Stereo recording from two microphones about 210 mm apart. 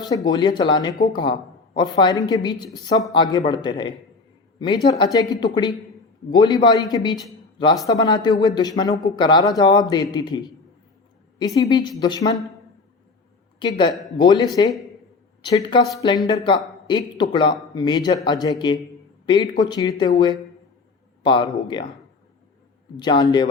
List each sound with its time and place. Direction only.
0.0 s a woman's voice: 20° left (ahead or behind)
13.6 s speech: 20° left (ahead or behind)
23.0 s speech: 20° left (ahead or behind)